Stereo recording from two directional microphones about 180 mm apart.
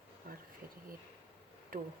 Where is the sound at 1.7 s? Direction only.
50° right (ahead or behind).